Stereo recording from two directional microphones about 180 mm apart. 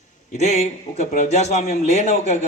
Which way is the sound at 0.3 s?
40° left (ahead or behind).